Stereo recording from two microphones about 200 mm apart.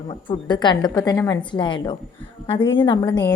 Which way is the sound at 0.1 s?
25° left (ahead or behind).